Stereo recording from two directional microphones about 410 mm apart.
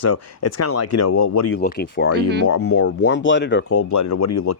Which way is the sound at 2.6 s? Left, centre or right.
Left.